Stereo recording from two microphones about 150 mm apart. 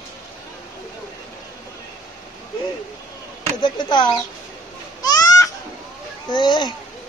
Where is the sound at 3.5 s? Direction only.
30° left (ahead or behind).